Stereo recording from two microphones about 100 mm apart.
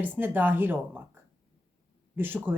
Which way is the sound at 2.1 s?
20° right (ahead or behind).